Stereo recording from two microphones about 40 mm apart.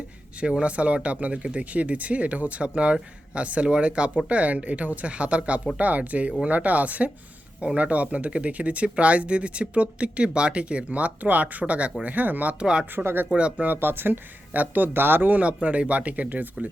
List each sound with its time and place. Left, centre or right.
0.6 s speech: right
12.5 s speech: right
12.8 s speech: right
13.3 s speech: right
13.7 s speech: right
14.5 s speech: right
15.3 s speech: right